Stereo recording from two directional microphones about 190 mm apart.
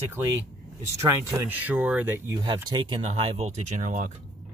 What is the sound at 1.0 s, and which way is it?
Speech, 10° right (ahead or behind).